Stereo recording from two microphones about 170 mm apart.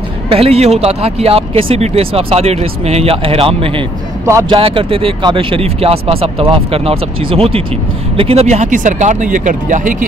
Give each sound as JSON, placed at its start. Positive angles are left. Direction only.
{"t": 0.3, "sound": "speech", "side_deg": -35}